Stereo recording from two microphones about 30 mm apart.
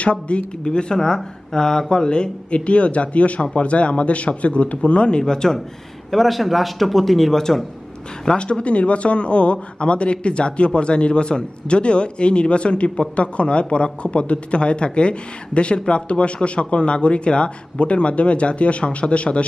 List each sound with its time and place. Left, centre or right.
0.0 s speech: left
0.7 s speech: left
2.5 s speech: left
5.2 s speech: centre
6.1 s speech: centre
8.3 s speech: left